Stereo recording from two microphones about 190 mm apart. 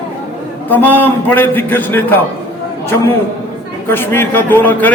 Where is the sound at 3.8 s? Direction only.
10° left (ahead or behind).